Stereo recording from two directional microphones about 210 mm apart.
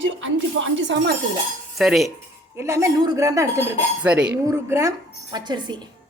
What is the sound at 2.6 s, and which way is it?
Cutlery, 15° right (ahead or behind).